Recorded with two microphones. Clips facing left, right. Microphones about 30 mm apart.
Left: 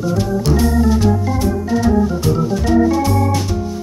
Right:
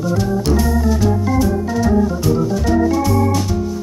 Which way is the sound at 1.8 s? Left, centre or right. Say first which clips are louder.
Even; centre.